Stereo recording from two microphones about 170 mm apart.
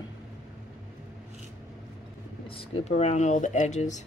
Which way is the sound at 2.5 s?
35° left (ahead or behind).